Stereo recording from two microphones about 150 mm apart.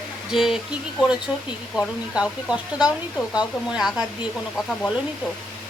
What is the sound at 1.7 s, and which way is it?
Speech, 5° right (ahead or behind).